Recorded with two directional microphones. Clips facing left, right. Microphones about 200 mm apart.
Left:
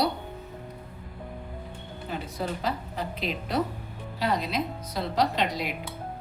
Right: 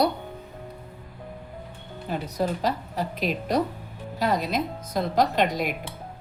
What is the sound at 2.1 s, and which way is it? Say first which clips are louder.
Speech: right 5 dB; 40° right (ahead or behind).